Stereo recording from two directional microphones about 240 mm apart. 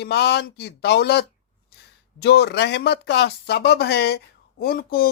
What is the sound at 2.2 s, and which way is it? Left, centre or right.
Speech, left.